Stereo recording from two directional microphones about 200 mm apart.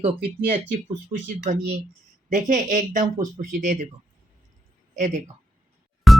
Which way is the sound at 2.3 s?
40° right (ahead or behind).